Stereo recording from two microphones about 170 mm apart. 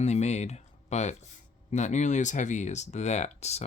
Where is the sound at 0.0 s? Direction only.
40° left (ahead or behind).